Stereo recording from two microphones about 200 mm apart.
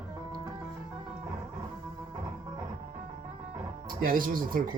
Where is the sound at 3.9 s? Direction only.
45° right (ahead or behind).